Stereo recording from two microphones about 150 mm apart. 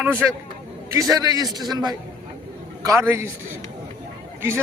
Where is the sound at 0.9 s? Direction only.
25° right (ahead or behind).